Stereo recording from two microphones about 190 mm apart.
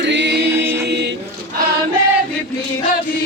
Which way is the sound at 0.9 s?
65° right (ahead or behind).